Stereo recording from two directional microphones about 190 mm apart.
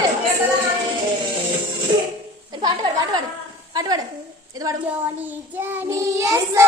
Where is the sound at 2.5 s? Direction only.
20° right (ahead or behind).